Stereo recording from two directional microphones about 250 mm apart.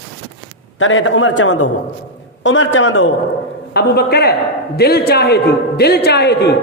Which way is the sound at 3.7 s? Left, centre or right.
Left.